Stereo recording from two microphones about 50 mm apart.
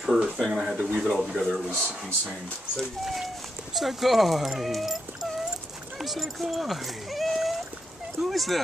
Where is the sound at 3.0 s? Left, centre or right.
Centre.